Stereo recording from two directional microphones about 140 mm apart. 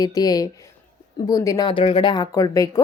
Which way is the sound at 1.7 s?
40° left (ahead or behind).